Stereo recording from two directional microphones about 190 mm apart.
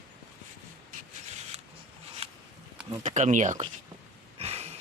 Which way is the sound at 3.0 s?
40° right (ahead or behind).